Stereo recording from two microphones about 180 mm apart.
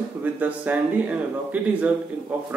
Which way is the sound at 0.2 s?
10° right (ahead or behind).